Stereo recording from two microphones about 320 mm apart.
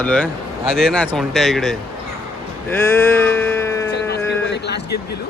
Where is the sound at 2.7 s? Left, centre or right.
Centre.